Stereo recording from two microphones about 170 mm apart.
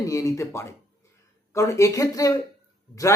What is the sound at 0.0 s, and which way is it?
A man's voice, 20° left (ahead or behind).